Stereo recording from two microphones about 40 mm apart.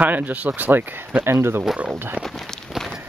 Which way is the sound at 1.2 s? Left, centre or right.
Right.